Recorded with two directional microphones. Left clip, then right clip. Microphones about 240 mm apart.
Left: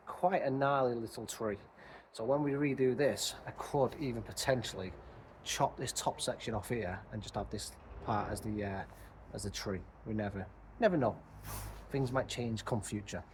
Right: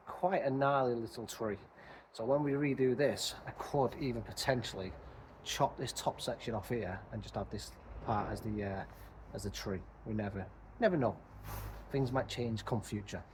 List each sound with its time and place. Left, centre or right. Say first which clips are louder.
0.1 s speech: left 1 dB; centre